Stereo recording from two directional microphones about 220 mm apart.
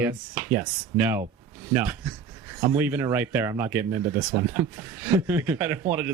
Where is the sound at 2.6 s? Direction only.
10° right (ahead or behind).